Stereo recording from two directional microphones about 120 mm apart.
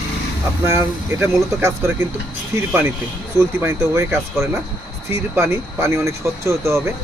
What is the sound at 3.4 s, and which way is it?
A man's voice, 20° right (ahead or behind).